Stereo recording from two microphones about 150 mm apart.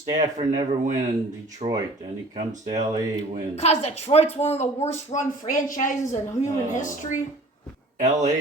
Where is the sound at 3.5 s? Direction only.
45° left (ahead or behind).